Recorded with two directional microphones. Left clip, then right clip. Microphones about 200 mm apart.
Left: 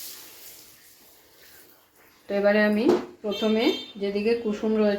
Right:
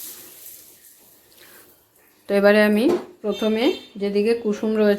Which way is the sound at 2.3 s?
55° right (ahead or behind).